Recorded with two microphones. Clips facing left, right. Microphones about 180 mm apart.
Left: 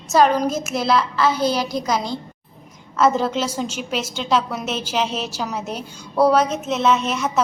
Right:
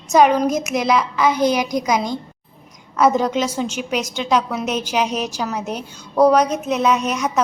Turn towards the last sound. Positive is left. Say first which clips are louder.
# right 1 dB
turn(degrees=-10)  # may be behind; listen again after turning